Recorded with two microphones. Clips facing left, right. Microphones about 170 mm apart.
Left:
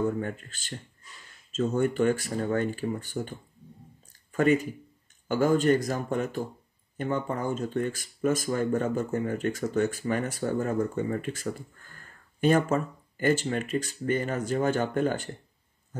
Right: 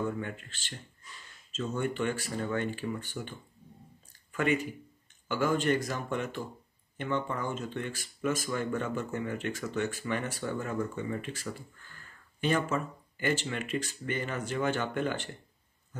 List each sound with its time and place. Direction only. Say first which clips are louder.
0.2 s speech: left 5 dB; 40° left (ahead or behind)